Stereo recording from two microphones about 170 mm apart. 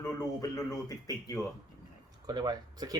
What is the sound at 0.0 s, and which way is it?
Speech, 20° left (ahead or behind).